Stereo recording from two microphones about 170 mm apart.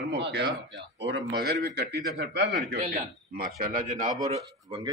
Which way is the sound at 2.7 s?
45° right (ahead or behind).